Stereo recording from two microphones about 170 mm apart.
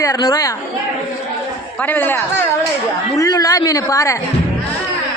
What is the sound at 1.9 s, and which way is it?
A woman's voice, 10° left (ahead or behind).